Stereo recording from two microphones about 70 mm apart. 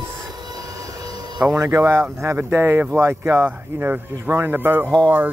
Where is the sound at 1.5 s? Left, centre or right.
Right.